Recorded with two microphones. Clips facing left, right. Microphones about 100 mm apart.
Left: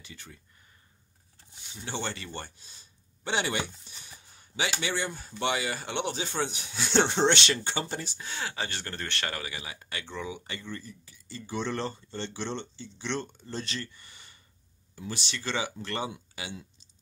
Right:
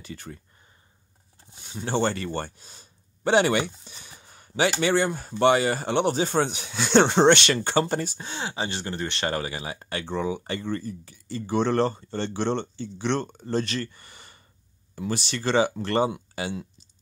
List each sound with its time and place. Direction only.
0.0 s speech: 50° right (ahead or behind)
1.5 s speech: 45° right (ahead or behind)
3.5 s speech: 90° right; by 6.5 s 50° right (ahead or behind)
6.5 s speech: 70° right (ahead or behind); by 8.2 s 50° right (ahead or behind)
8.2 s speech: 25° right (ahead or behind)
9.3 s speech: 35° right (ahead or behind)